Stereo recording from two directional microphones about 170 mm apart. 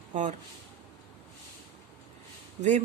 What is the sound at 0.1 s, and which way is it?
Speech, 45° right (ahead or behind).